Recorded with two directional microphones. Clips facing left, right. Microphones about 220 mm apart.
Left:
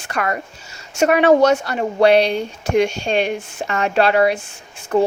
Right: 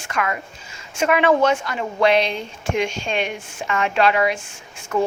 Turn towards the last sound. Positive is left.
turn(degrees=35)  # may be behind; listen again after turning